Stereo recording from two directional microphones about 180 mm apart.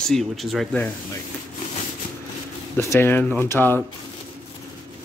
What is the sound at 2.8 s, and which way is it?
Speech, 15° left (ahead or behind).